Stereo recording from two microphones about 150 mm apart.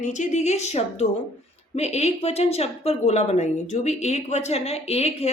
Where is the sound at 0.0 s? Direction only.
55° left (ahead or behind).